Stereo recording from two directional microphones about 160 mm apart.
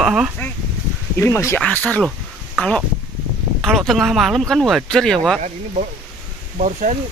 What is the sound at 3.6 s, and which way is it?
Speech, centre (ahead or behind).